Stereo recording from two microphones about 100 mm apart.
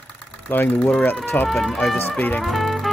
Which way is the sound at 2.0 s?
20° left (ahead or behind).